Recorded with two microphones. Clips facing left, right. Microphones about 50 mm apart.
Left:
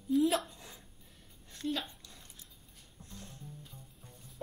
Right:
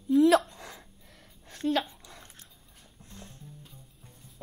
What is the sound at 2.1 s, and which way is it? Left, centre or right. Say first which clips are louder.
Dog: right 6 dB; right.